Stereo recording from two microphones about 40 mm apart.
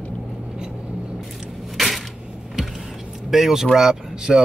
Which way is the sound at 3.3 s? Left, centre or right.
Centre.